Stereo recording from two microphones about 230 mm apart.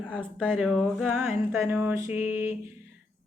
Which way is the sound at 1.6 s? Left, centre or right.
Centre.